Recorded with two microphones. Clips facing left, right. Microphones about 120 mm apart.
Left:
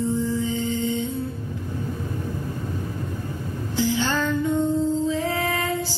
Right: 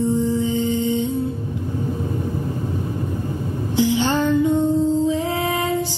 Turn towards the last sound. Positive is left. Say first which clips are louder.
# right 3 dB
turn(degrees=-20)  # may be behind; listen again after turning